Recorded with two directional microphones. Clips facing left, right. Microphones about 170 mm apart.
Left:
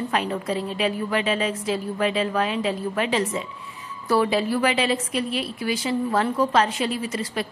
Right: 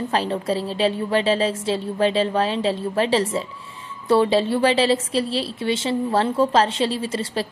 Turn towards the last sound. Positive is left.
turn(degrees=-30)  # may be behind; listen again after turning